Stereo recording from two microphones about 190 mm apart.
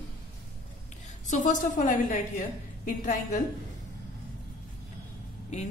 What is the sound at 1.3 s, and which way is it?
Speech, 40° left (ahead or behind).